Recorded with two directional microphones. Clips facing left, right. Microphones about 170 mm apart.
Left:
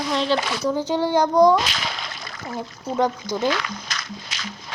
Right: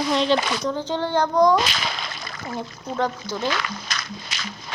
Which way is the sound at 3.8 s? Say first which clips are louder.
Right 1 dB; 65° right (ahead or behind).